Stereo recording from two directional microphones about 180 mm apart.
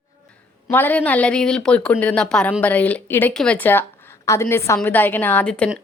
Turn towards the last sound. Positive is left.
turn(degrees=5)  # may be behind; listen again after turning